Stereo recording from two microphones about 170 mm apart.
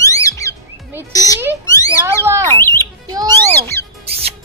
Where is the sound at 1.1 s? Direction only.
20° left (ahead or behind).